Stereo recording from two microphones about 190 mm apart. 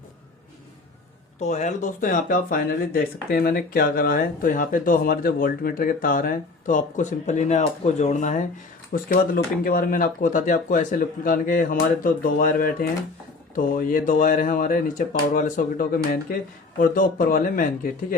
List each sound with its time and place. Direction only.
1.4 s speech: 35° left (ahead or behind)